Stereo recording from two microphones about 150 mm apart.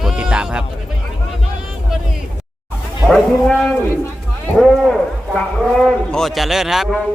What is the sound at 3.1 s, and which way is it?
Speech, 5° left (ahead or behind).